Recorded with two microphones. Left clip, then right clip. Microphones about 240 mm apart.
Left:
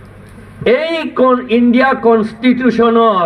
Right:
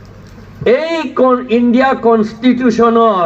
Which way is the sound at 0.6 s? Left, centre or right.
Left.